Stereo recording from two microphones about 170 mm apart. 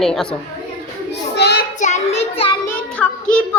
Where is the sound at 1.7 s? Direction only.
45° left (ahead or behind).